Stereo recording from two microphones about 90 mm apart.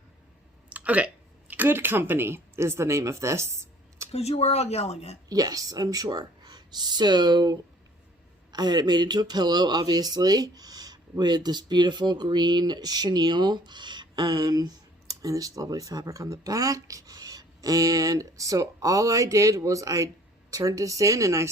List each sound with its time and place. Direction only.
0.7 s speech: 15° right (ahead or behind); by 3.4 s 35° right (ahead or behind)
5.3 s speech: 45° right (ahead or behind)